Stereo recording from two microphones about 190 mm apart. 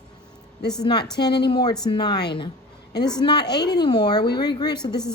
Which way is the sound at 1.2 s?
60° left (ahead or behind).